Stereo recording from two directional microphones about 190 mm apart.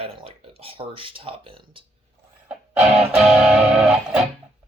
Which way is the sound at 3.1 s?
5° right (ahead or behind).